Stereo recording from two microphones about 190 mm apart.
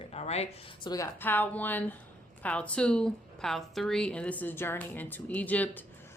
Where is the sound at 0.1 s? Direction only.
35° left (ahead or behind).